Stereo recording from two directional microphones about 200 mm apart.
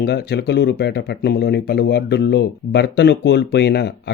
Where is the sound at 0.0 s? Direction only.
55° left (ahead or behind).